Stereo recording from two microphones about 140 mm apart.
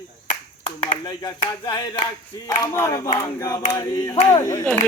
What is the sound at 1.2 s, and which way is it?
Speech, 35° left (ahead or behind).